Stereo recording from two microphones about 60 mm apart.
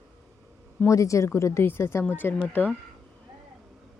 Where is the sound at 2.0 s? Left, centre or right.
Left.